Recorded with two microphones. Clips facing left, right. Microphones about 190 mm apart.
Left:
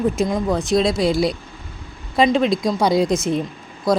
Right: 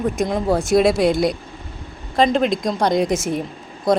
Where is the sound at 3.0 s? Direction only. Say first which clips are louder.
Left 1 dB; 25° right (ahead or behind).